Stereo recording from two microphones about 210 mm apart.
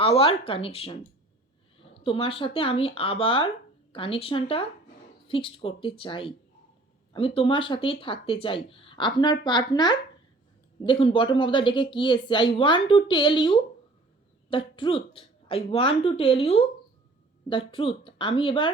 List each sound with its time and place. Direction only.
0.0 s speech: 25° left (ahead or behind)